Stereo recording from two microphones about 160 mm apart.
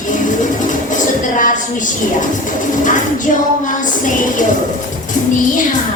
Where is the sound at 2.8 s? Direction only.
55° left (ahead or behind).